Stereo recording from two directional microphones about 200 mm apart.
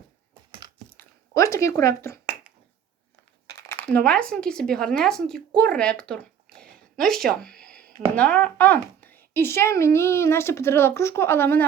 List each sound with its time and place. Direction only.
1.3 s speech: 15° left (ahead or behind)
3.7 s speech: 5° left (ahead or behind)
5.5 s a sound: 5° left (ahead or behind)
8.1 s speech: 5° left (ahead or behind)